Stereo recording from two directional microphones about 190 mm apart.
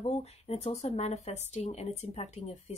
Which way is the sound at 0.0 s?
35° left (ahead or behind).